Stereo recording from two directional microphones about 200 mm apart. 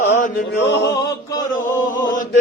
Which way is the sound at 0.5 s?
55° left (ahead or behind).